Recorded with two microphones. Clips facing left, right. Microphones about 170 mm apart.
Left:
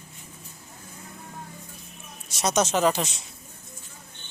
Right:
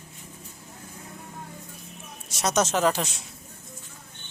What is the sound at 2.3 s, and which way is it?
Speech, 5° right (ahead or behind).